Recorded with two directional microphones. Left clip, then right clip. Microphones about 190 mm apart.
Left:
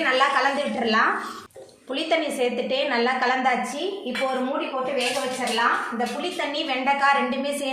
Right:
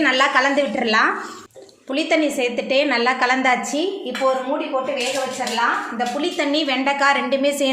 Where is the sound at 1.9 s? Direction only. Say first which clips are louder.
Right 4 dB; 35° right (ahead or behind).